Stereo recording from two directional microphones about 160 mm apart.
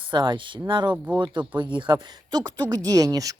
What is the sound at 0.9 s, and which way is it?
Speech, 10° right (ahead or behind).